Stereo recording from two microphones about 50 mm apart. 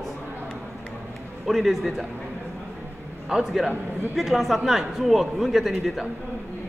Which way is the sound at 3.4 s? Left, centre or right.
Centre.